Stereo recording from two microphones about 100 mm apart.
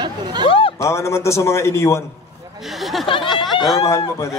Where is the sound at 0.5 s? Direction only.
65° left (ahead or behind).